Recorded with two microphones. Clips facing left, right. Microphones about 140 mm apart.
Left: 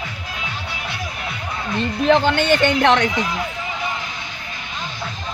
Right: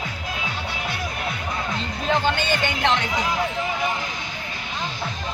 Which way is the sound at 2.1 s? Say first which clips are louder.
Left 6 dB; 65° left (ahead or behind).